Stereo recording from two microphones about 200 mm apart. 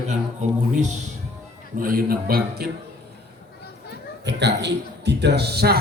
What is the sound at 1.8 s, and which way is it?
Speech, 45° right (ahead or behind).